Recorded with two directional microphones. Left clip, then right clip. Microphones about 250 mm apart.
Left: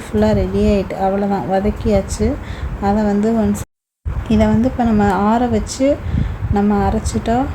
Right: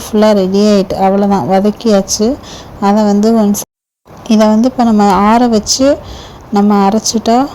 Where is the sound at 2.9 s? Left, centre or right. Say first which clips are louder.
Right 7 dB; centre.